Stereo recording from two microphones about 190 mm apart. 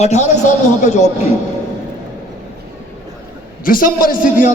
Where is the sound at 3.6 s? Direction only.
50° left (ahead or behind).